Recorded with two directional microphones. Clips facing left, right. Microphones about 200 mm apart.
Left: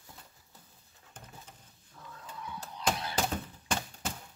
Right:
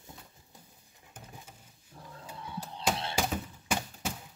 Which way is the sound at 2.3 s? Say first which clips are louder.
Right 1 dB; 30° right (ahead or behind).